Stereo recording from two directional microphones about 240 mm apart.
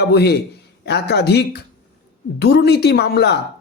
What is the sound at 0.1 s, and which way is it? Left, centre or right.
Speech, left.